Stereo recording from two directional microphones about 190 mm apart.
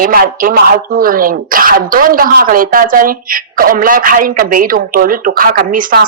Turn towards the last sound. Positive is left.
turn(degrees=-45)  # may be behind; listen again after turning